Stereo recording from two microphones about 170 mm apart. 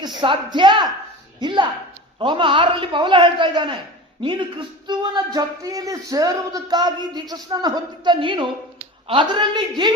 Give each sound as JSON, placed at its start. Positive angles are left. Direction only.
{"t": 0.2, "sound": "a woman's voice", "side_deg": -25}